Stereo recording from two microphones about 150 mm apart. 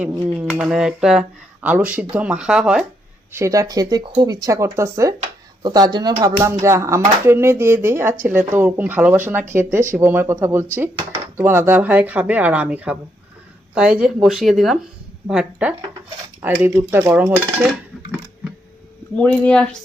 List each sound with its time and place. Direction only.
0.6 s speech: 5° right (ahead or behind)
3.3 s speech: 20° right (ahead or behind)
19.1 s speech: 5° left (ahead or behind)